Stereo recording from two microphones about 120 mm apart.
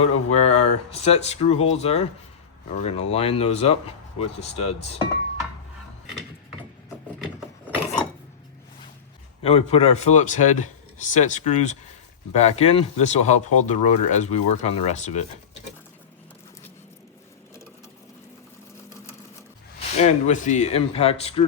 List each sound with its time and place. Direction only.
0.0 s speech: 70° left (ahead or behind)
9.4 s a man's voice: 60° left (ahead or behind); by 11.8 s 80° left
12.3 s speech: 65° left (ahead or behind)
20.0 s speech: 75° left (ahead or behind); by 21.4 s 55° left (ahead or behind)